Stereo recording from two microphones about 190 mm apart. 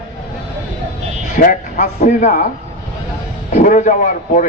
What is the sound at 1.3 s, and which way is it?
Speech, 45° left (ahead or behind).